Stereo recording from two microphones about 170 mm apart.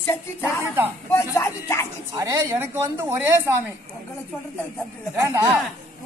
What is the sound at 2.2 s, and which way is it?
Speech, 20° right (ahead or behind).